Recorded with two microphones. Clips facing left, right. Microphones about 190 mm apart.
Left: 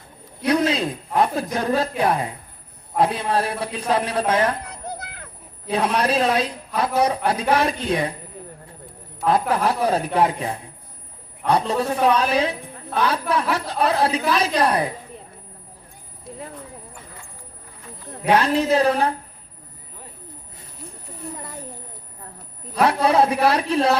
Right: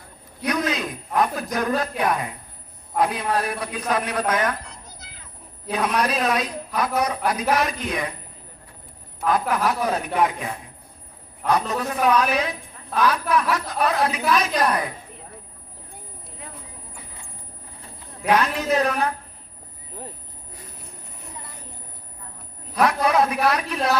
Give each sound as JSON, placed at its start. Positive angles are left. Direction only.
{"t": 0.4, "sound": "speech", "side_deg": 30}
{"t": 4.7, "sound": "children playing", "side_deg": 60}
{"t": 5.7, "sound": "a woman's voice", "side_deg": 30}
{"t": 9.2, "sound": "a woman's voice", "side_deg": 30}
{"t": 18.3, "sound": "a woman's voice", "side_deg": 30}
{"t": 22.7, "sound": "speech", "side_deg": 30}